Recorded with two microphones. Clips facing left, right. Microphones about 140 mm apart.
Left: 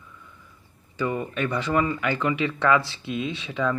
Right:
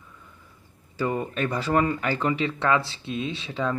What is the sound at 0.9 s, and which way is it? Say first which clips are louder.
Speech: even; 40° right (ahead or behind).